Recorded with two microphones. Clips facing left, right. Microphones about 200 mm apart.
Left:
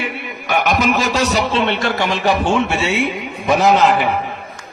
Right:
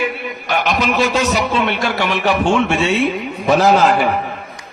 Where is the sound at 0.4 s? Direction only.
50° left (ahead or behind).